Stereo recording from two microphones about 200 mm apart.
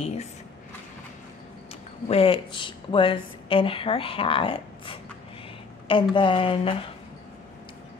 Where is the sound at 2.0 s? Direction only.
30° left (ahead or behind).